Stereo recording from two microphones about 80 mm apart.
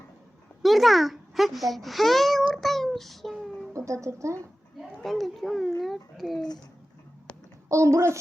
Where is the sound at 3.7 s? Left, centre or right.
Right.